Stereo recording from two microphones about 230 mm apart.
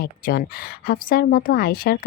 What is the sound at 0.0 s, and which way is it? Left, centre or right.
Speech, left.